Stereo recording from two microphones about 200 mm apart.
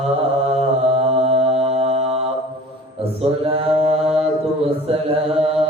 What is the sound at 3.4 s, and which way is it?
Mantra, 30° right (ahead or behind).